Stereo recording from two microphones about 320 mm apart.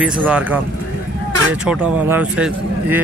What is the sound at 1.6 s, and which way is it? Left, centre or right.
Speech, centre.